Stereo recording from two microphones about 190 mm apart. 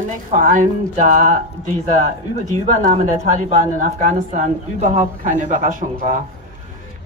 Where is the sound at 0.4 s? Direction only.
45° right (ahead or behind).